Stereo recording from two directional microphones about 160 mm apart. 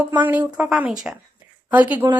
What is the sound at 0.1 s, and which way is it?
A woman's voice, 10° right (ahead or behind).